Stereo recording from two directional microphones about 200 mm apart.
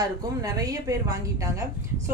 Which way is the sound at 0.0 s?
20° right (ahead or behind).